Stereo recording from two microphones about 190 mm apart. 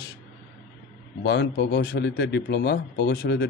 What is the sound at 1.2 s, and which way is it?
Speech, 65° left (ahead or behind).